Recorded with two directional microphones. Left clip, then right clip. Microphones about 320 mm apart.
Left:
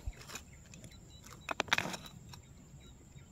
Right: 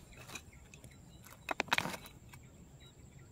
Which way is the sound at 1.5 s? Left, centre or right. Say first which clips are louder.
Left 1 dB; centre.